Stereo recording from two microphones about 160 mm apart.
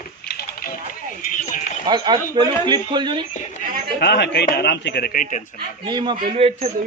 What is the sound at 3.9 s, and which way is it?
Speech, 90° left.